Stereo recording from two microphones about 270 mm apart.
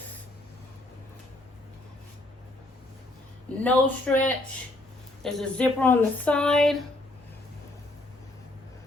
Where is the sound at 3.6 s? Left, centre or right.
Centre.